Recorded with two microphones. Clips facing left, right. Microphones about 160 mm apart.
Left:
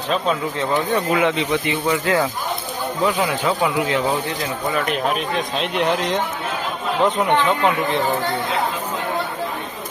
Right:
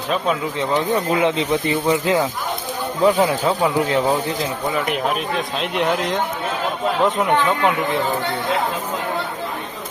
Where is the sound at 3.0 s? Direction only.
35° right (ahead or behind).